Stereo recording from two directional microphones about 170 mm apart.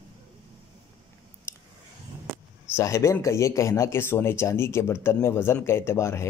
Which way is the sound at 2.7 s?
15° left (ahead or behind).